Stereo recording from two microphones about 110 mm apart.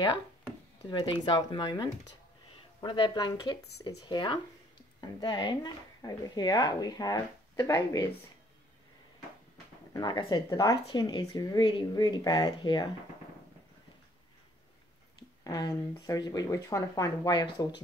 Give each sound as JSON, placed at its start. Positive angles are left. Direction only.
{"t": 1.0, "sound": "speech", "side_deg": 50}
{"t": 9.9, "sound": "speech", "side_deg": 40}
{"t": 15.1, "sound": "speech", "side_deg": 35}